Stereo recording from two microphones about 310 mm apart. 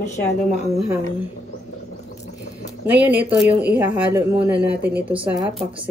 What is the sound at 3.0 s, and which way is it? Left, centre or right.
A woman's voice, centre.